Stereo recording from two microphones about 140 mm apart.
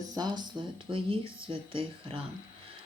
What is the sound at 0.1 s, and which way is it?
Speech, 30° right (ahead or behind).